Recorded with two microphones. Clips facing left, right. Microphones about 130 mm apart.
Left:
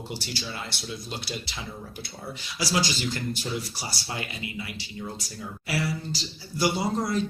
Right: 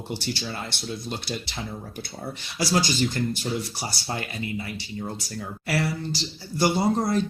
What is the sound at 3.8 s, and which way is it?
A man's voice, 45° right (ahead or behind).